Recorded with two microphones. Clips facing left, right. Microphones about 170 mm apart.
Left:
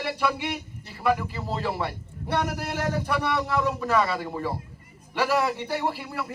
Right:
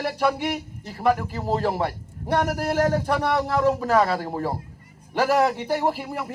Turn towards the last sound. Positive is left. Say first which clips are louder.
# right 4 dB
turn(degrees=-45)  # may be behind; listen again after turning